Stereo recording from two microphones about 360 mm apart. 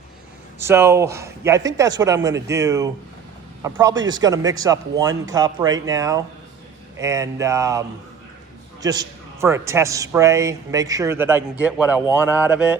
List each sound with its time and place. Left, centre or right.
0.6 s a man's voice: centre